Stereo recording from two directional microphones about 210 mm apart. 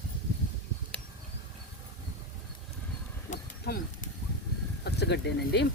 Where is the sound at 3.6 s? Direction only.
45° left (ahead or behind).